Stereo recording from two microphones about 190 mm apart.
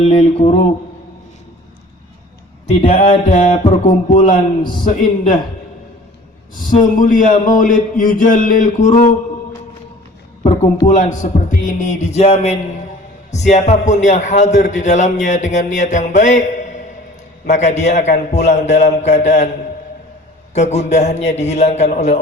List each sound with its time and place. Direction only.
0.0 s a man's voice: 35° left (ahead or behind)
2.8 s mantra: 30° left (ahead or behind)
3.3 s a man's voice: 40° left (ahead or behind)
4.6 s mantra: 25° left (ahead or behind)
6.9 s speech: 45° left (ahead or behind)
10.4 s a sound: 35° left (ahead or behind)
10.8 s a man's voice: 40° left (ahead or behind)
20.5 s a man's voice: 35° left (ahead or behind)